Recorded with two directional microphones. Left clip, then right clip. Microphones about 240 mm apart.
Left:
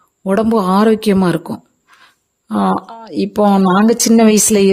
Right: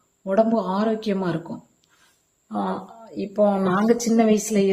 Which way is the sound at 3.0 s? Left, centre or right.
Left.